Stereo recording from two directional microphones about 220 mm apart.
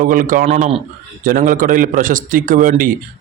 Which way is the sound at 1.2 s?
40° right (ahead or behind).